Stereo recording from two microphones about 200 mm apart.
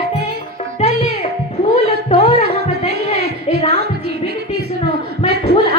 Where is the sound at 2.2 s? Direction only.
30° left (ahead or behind).